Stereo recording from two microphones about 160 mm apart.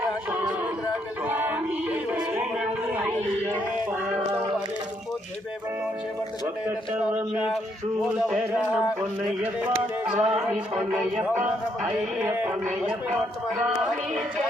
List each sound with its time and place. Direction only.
1.3 s music: 10° right (ahead or behind)
6.7 s speech: 10° right (ahead or behind)
10.1 s speech: 5° right (ahead or behind)